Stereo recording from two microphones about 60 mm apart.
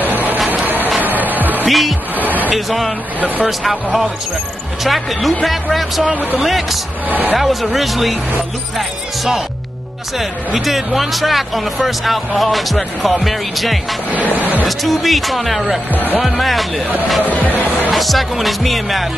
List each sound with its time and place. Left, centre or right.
0.1 s a sound: right
0.8 s music: right
1.7 s speech: centre
2.2 s a sound: right
2.5 s speech: centre
7.1 s speech: right
7.3 s speech: centre
15.9 s speech: left
16.2 s speech: centre
17.2 s speech: left
17.9 s speech: centre